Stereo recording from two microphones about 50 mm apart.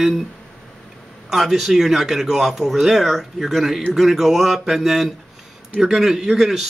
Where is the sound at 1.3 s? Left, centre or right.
Centre.